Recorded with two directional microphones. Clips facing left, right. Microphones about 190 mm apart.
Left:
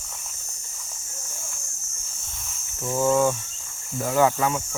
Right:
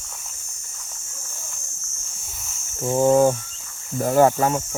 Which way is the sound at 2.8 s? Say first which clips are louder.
Right 5 dB; 35° right (ahead or behind).